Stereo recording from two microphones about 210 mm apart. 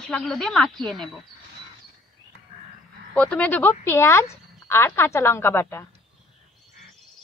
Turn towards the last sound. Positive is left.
turn(degrees=10)  # may be behind; listen again after turning